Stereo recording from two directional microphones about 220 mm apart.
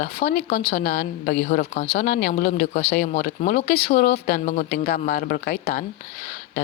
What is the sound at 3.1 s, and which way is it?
Speech, 35° left (ahead or behind).